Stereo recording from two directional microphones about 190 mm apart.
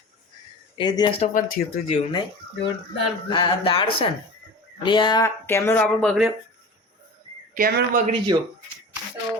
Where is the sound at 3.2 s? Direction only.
25° left (ahead or behind).